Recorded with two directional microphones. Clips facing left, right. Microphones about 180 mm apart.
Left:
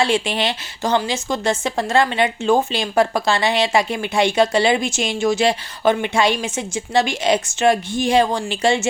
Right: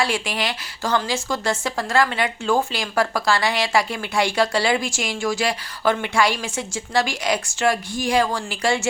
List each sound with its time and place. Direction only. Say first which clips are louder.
0.0 s speech: left 5 dB; 25° left (ahead or behind)